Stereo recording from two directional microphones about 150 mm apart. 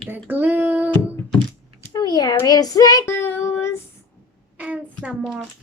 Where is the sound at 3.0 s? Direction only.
15° left (ahead or behind).